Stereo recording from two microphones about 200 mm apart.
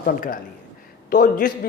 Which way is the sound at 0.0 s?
45° left (ahead or behind).